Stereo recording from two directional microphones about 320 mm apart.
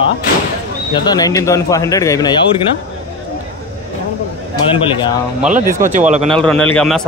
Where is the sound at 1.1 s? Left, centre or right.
Centre.